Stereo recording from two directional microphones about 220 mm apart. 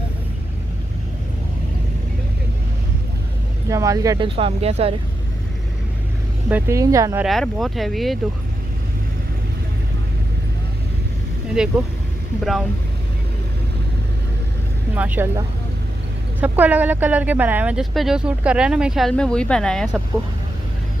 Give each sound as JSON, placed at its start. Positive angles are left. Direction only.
{"t": 3.6, "sound": "speech", "side_deg": -15}
{"t": 6.5, "sound": "speech", "side_deg": -15}
{"t": 7.2, "sound": "speech", "side_deg": 0}
{"t": 11.5, "sound": "speech", "side_deg": -5}
{"t": 15.0, "sound": "speech", "side_deg": -10}